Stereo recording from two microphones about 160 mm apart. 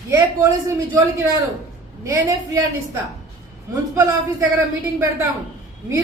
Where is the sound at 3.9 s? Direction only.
20° right (ahead or behind).